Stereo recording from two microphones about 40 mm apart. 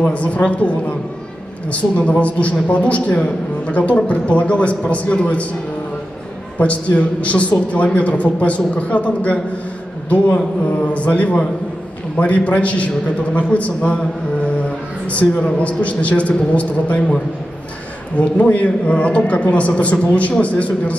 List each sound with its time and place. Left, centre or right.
0.1 s a man's voice: left
6.6 s a man's voice: left
15.0 s a man's voice: left
18.1 s a man's voice: left